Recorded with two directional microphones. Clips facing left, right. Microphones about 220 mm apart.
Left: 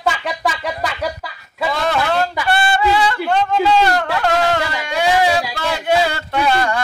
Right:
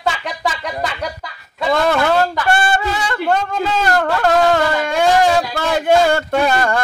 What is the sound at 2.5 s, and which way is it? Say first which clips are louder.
Speech: left 1 dB; 45° right (ahead or behind).